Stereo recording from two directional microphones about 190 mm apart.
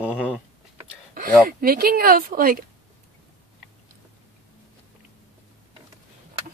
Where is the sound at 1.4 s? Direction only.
50° right (ahead or behind).